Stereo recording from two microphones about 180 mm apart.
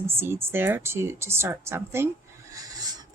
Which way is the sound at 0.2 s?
15° right (ahead or behind).